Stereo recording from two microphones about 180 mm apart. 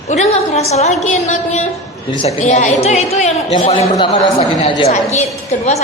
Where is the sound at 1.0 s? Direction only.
40° left (ahead or behind).